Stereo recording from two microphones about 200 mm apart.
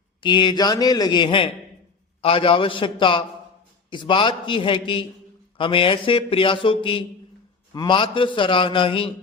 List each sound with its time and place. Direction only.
0.2 s speech: 25° left (ahead or behind)